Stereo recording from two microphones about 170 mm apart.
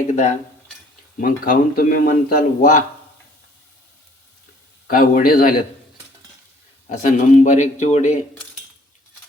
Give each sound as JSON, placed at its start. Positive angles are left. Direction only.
{"t": 0.1, "sound": "a man's voice", "side_deg": 50}
{"t": 4.9, "sound": "a man's voice", "side_deg": 55}
{"t": 6.8, "sound": "a man's voice", "side_deg": 45}